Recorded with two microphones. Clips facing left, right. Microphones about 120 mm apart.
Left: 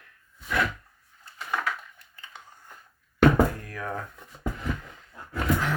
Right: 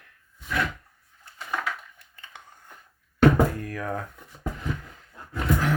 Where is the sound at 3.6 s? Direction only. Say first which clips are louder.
Right 3 dB; 50° right (ahead or behind).